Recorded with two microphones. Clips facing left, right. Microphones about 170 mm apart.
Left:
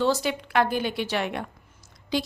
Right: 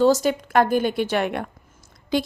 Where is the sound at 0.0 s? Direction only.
45° right (ahead or behind).